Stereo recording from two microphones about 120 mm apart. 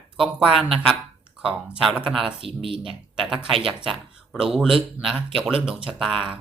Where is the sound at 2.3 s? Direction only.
45° right (ahead or behind).